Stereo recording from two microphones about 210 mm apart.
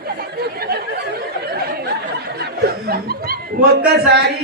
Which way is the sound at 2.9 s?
45° right (ahead or behind).